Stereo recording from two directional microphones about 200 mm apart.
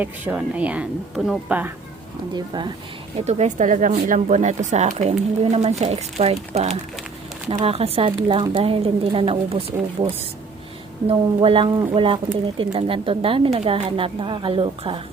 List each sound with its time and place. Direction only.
0.0 s a woman's voice: 5° right (ahead or behind)
2.3 s speech: 20° right (ahead or behind)
3.2 s speech: 35° right (ahead or behind)